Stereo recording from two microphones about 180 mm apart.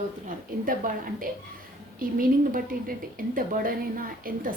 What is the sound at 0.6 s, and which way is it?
A woman's voice, 50° right (ahead or behind).